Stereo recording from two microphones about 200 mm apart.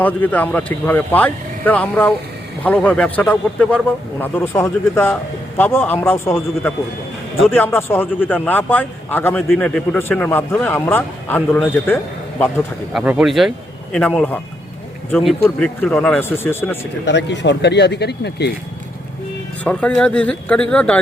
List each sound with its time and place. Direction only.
0.0 s a man's voice: 10° left (ahead or behind)
6.3 s a man's voice: centre (ahead or behind)
12.9 s a man's voice: 5° right (ahead or behind); by 16.6 s 10° left (ahead or behind)
17.1 s speech: 60° left (ahead or behind)
19.6 s speech: 5° left (ahead or behind)